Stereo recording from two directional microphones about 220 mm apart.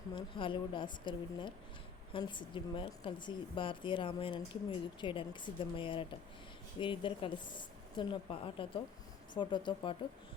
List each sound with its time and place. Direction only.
0.1 s a woman's voice: 25° left (ahead or behind)